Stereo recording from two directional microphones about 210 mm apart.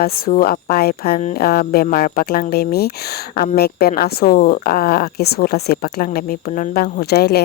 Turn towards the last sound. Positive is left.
turn(degrees=50)  # may be behind; listen again after turning